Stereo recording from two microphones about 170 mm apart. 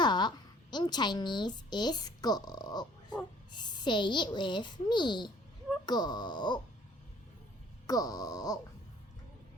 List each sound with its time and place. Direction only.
0.0 s a woman's voice: 25° left (ahead or behind)
7.9 s a child's voice: 20° left (ahead or behind)